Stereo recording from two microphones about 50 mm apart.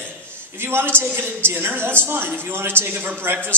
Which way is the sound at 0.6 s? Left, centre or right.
Right.